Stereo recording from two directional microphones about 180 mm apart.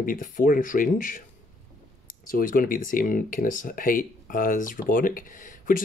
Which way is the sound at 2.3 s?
50° left (ahead or behind).